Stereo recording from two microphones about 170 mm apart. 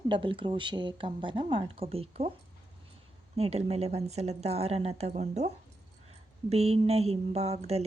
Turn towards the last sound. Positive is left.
turn(degrees=-40)  # may be behind; listen again after turning